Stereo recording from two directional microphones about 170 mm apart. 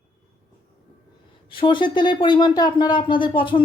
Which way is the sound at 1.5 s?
30° left (ahead or behind).